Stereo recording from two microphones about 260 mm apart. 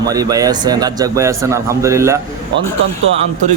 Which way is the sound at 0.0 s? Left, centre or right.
Centre.